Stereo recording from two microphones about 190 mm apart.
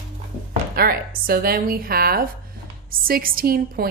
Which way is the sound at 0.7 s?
50° right (ahead or behind).